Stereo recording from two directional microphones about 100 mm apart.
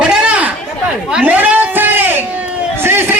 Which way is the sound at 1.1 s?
15° right (ahead or behind).